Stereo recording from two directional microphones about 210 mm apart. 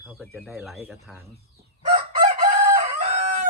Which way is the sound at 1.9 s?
40° right (ahead or behind).